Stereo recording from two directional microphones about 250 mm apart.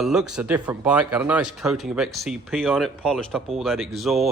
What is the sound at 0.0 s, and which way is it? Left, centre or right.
Speech, centre.